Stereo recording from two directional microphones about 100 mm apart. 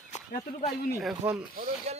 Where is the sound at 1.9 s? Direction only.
90° right.